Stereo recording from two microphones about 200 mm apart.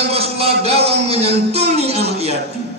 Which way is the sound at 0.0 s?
30° right (ahead or behind).